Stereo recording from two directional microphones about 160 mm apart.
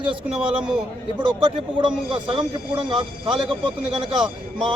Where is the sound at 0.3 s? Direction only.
5° right (ahead or behind).